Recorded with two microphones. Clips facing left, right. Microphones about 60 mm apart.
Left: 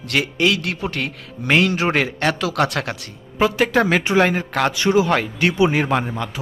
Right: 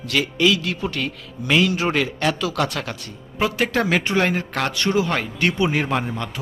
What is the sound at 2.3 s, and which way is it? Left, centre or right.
Speech, left.